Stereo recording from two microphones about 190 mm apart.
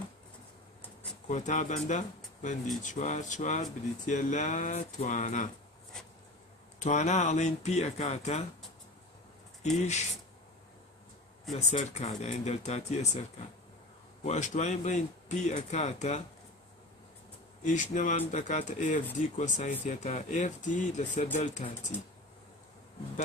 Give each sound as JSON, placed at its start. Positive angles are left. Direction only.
{"t": 1.3, "sound": "speech", "side_deg": 40}
{"t": 5.9, "sound": "a sound", "side_deg": 5}
{"t": 6.8, "sound": "speech", "side_deg": 40}
{"t": 9.6, "sound": "speech", "side_deg": 35}
{"t": 11.5, "sound": "speech", "side_deg": 35}
{"t": 14.2, "sound": "speech", "side_deg": 40}
{"t": 17.6, "sound": "speech", "side_deg": 40}